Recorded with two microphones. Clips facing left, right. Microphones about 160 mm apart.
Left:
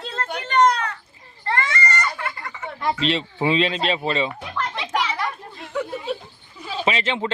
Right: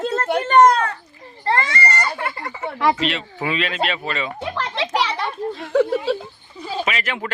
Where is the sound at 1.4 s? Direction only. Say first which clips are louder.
Right 3 dB; 30° right (ahead or behind).